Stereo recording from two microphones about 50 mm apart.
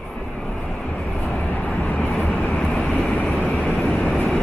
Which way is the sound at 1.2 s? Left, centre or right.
Left.